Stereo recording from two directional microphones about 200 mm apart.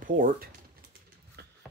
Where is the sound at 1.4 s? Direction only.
55° right (ahead or behind).